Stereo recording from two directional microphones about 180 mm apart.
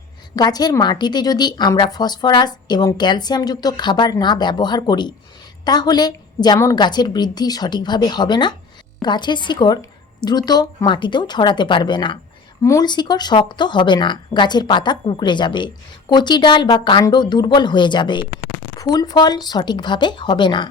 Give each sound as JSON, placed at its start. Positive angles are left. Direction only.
{"t": 0.3, "sound": "speech", "side_deg": 20}